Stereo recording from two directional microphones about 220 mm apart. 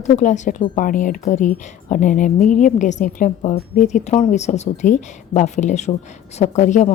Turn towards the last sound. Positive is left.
turn(degrees=35)  # may be behind; listen again after turning